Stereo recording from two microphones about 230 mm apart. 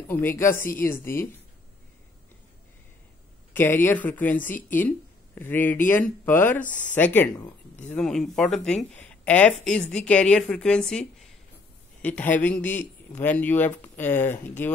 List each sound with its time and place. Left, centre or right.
0.4 s a man's voice: centre
3.5 s a man's voice: centre
6.6 s speech: left
7.0 s a man's voice: centre